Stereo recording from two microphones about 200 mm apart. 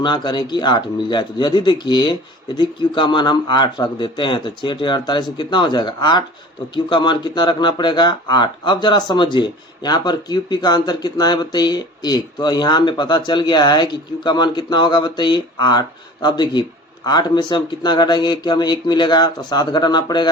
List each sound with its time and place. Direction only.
0.0 s speech: 20° left (ahead or behind)